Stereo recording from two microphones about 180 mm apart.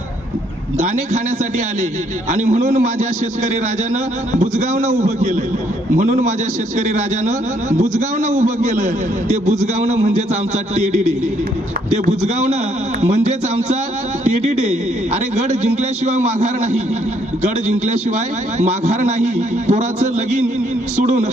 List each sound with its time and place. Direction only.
0.8 s a man's voice: 40° right (ahead or behind)
4.5 s a man's voice: 40° right (ahead or behind)
12.0 s a man's voice: 35° right (ahead or behind)
14.4 s a man's voice: 35° right (ahead or behind)